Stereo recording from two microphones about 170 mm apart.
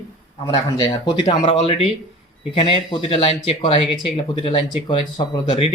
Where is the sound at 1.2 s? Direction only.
40° left (ahead or behind).